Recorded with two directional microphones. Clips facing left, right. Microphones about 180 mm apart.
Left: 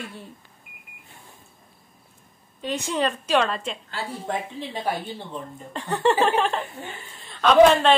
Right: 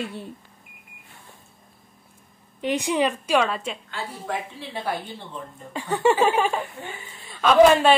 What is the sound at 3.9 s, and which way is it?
Speech, 30° left (ahead or behind).